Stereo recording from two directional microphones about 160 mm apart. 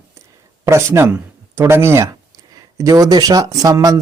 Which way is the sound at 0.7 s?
15° right (ahead or behind).